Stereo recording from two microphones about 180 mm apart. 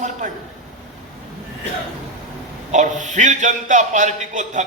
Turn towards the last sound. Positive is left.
turn(degrees=-40)  # may be behind; listen again after turning